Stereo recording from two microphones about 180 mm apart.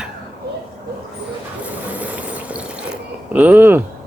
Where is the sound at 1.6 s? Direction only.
10° right (ahead or behind).